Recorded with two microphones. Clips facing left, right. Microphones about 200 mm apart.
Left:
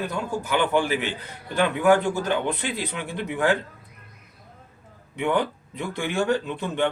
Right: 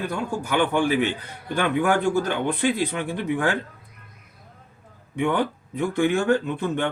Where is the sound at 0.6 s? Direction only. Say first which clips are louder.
Right 3 dB; 50° right (ahead or behind).